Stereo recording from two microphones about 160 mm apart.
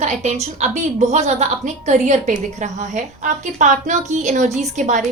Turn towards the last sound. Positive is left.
turn(degrees=-50)  # may be behind; listen again after turning